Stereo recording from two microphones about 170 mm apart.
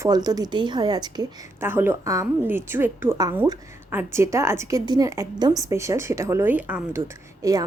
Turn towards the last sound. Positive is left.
turn(degrees=-20)  # may be behind; listen again after turning